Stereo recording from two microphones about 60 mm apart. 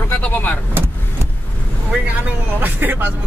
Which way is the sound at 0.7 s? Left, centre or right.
Right.